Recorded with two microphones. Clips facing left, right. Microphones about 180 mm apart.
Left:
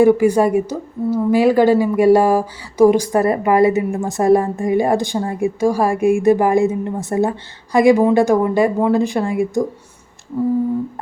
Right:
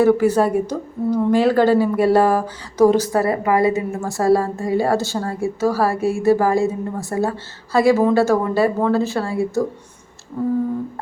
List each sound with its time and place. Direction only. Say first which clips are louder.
0.0 s a woman's voice: left 3 dB; 10° left (ahead or behind)